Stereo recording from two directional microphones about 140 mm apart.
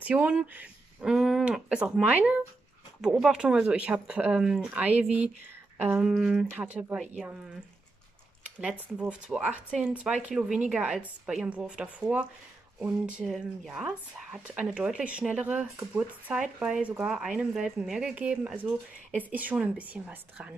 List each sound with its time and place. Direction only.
0.0 s speech: 10° right (ahead or behind)
8.5 s a sound: 10° right (ahead or behind)
8.9 s speech: 10° right (ahead or behind)